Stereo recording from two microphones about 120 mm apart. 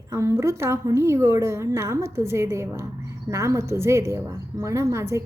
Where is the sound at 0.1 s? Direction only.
25° right (ahead or behind).